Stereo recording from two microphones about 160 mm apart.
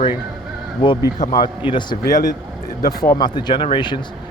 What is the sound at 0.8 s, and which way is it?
Speech, 30° left (ahead or behind).